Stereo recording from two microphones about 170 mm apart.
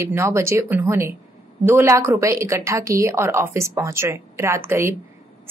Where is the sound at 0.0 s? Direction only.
15° right (ahead or behind).